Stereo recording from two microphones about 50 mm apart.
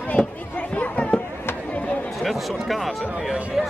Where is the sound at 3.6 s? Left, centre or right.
Centre.